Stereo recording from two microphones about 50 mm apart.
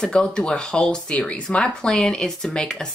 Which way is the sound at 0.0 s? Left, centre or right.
Centre.